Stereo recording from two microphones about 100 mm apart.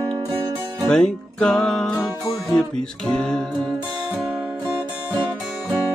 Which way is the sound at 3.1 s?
10° left (ahead or behind).